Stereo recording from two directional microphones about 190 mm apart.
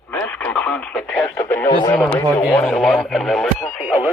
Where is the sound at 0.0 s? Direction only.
10° left (ahead or behind).